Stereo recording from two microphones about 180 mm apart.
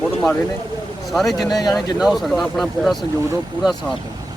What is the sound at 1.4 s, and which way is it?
Speech, 20° left (ahead or behind).